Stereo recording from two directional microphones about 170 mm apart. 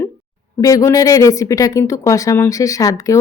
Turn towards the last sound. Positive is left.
turn(degrees=20)  # may be behind; listen again after turning